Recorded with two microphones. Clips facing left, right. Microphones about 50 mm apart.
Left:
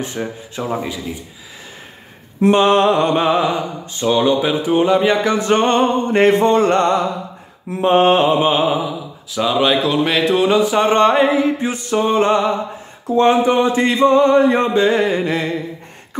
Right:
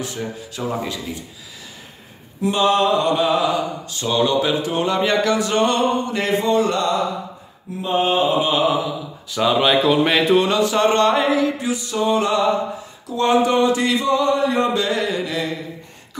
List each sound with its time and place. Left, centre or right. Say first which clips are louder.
0.0 s speech: left 3 dB; left
2.4 s speech: left 5 dB; left; by 5.2 s centre
5.2 s a sound: left 3 dB; left
7.8 s mantra: left 6 dB; left
8.4 s speech: left 3 dB; left
9.3 s speech: left 1 dB; centre
10.5 s a sound: left 3 dB; centre; by 15.5 s left